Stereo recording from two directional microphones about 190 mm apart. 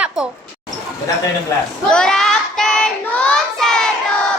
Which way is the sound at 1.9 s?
5° left (ahead or behind).